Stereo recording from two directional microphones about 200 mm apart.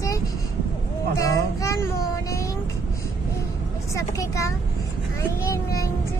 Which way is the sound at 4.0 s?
15° left (ahead or behind).